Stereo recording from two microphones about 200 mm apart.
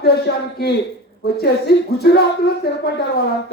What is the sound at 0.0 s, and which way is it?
A man's voice, 50° left (ahead or behind).